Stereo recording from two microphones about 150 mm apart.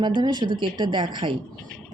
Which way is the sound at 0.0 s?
30° right (ahead or behind).